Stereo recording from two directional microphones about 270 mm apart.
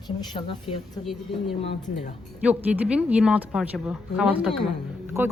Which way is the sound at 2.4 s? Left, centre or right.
Centre.